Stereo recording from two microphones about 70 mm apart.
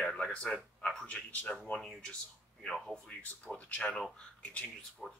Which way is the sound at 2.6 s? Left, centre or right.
Centre.